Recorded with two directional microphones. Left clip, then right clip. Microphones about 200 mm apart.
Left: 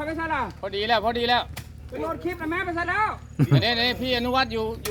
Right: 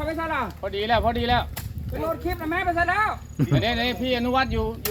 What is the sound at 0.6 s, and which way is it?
Speech, 35° left (ahead or behind).